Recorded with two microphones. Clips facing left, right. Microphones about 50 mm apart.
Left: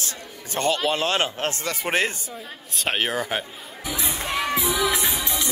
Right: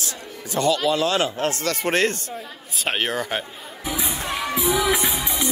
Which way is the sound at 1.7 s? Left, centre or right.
Centre.